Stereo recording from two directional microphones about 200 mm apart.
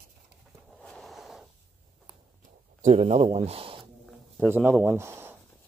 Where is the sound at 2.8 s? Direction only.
30° right (ahead or behind).